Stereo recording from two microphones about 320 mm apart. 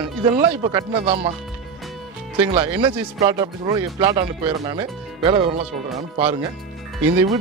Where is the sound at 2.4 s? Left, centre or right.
Centre.